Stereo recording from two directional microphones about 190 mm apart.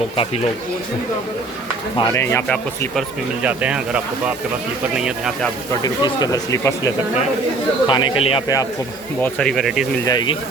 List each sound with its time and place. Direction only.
2.0 s speech: 15° left (ahead or behind)
3.4 s speech: 5° right (ahead or behind)
5.8 s speech: 20° left (ahead or behind)
9.2 s speech: 5° left (ahead or behind)
10.1 s speech: 20° left (ahead or behind)